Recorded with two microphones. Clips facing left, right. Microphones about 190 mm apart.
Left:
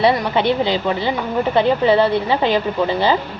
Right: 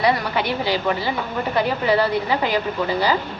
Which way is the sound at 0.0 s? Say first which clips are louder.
Left 4 dB; 25° left (ahead or behind).